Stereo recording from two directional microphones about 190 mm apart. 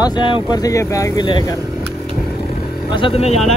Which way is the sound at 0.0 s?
25° left (ahead or behind).